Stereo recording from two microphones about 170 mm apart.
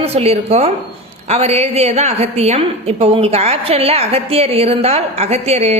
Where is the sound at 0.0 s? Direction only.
35° right (ahead or behind).